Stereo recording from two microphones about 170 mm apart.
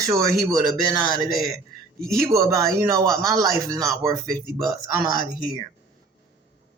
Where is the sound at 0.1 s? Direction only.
20° right (ahead or behind).